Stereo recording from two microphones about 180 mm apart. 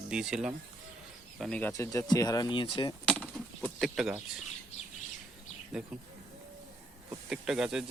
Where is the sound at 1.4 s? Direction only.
10° left (ahead or behind); by 2.9 s 25° left (ahead or behind).